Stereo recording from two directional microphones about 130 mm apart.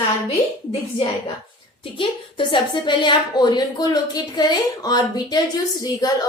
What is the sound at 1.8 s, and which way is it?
A woman's voice, 40° left (ahead or behind).